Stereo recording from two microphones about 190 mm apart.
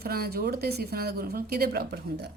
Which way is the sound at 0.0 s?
55° right (ahead or behind).